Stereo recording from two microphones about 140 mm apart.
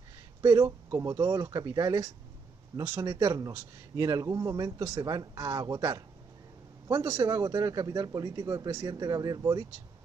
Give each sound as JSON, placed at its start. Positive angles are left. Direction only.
{"t": 0.4, "sound": "speech", "side_deg": -25}